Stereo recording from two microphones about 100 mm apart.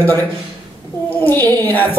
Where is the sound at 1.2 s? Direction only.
20° left (ahead or behind).